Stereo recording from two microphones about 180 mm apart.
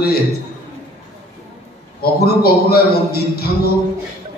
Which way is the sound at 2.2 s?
60° left (ahead or behind).